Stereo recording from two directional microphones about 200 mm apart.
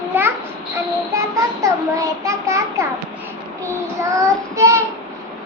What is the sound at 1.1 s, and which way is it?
Child singing, 15° right (ahead or behind).